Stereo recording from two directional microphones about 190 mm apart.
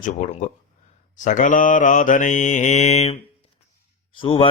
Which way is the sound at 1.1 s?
40° left (ahead or behind).